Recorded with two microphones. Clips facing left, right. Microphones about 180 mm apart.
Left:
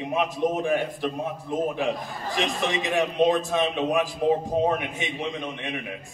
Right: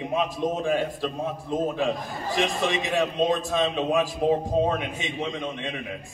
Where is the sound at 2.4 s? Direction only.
20° left (ahead or behind).